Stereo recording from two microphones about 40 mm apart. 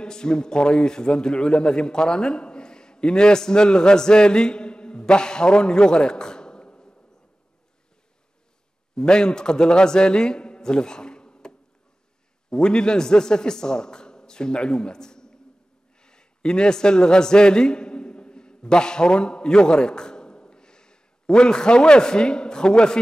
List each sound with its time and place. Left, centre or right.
0.0 s a man's voice: centre
8.9 s a man's voice: centre